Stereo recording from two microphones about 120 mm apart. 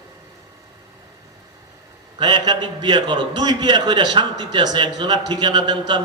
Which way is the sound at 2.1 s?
35° right (ahead or behind).